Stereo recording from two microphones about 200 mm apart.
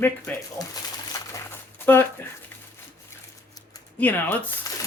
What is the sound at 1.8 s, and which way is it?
Speech, 10° left (ahead or behind).